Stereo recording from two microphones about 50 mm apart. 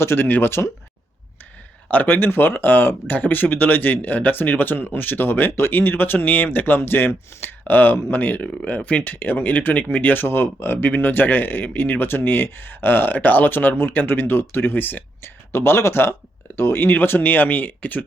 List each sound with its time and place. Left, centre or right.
0.2 s speech: left
1.9 s speech: left
15.2 s speech: left